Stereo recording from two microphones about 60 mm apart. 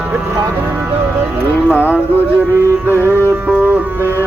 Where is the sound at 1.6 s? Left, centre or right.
Left.